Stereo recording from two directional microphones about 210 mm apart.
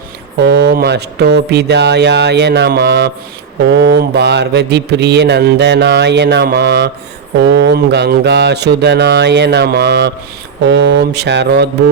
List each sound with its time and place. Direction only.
0.3 s mantra: 55° right (ahead or behind)